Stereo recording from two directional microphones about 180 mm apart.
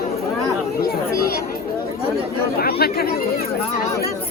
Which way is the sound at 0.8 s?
55° left (ahead or behind).